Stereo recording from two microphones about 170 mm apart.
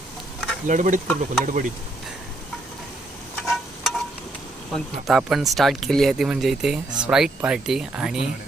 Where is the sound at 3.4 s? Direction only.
Centre (ahead or behind).